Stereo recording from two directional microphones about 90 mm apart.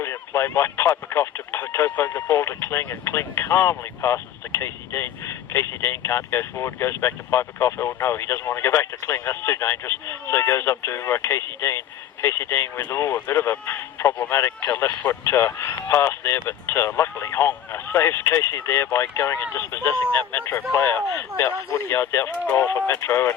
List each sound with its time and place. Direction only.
0.0 s speech: 30° left (ahead or behind)
22.9 s speech: 30° left (ahead or behind)